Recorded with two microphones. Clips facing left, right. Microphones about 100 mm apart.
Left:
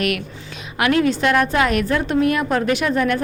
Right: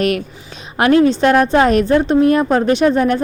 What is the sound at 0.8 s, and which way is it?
A woman's voice, 30° right (ahead or behind).